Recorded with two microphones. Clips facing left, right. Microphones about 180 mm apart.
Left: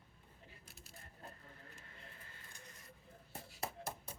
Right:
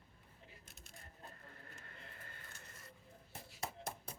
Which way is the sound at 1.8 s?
55° right (ahead or behind).